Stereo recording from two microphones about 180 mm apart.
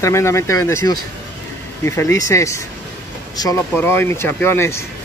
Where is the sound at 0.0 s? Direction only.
15° left (ahead or behind).